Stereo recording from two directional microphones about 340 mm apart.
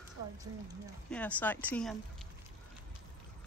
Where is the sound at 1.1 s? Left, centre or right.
Centre.